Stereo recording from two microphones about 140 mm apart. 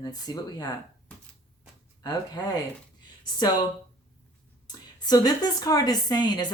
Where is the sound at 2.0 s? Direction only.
30° left (ahead or behind).